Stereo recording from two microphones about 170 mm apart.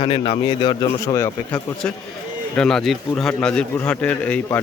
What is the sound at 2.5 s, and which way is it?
A man's voice, 5° left (ahead or behind).